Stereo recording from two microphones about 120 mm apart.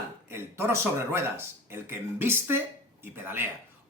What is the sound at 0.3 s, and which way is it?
A man's voice, 20° right (ahead or behind).